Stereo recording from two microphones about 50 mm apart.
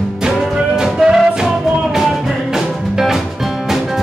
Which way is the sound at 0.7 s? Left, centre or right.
Centre.